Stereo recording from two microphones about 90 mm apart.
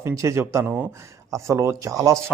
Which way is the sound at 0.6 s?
20° right (ahead or behind).